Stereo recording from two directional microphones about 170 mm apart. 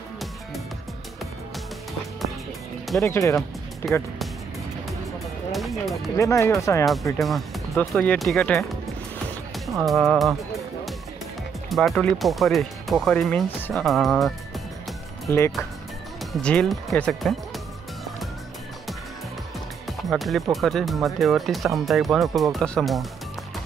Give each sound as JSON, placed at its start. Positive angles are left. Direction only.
{"t": 3.0, "sound": "speech", "side_deg": 15}
{"t": 5.5, "sound": "speech", "side_deg": 0}
{"t": 6.1, "sound": "speech", "side_deg": 15}
{"t": 7.2, "sound": "speech", "side_deg": 0}
{"t": 9.7, "sound": "speech", "side_deg": 0}
{"t": 11.7, "sound": "speech", "side_deg": 0}
{"t": 15.3, "sound": "speech", "side_deg": 10}
{"t": 16.4, "sound": "speech", "side_deg": 5}
{"t": 19.9, "sound": "speech", "side_deg": 0}